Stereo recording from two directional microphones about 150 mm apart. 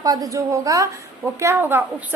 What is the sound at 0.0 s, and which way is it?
A woman's voice, 25° right (ahead or behind).